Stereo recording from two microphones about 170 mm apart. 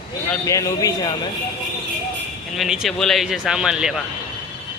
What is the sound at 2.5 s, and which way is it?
Speech, centre (ahead or behind).